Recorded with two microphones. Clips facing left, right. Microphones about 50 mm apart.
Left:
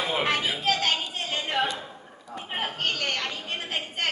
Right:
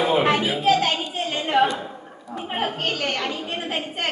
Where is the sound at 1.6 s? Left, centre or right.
Centre.